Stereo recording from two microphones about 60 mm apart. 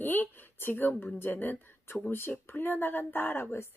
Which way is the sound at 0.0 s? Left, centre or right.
Left.